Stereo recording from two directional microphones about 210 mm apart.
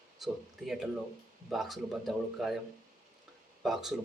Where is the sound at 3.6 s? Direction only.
Centre (ahead or behind).